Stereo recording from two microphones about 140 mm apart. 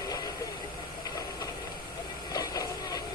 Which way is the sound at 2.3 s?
25° left (ahead or behind).